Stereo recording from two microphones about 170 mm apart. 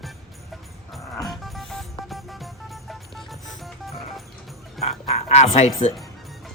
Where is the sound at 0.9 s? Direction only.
Centre (ahead or behind).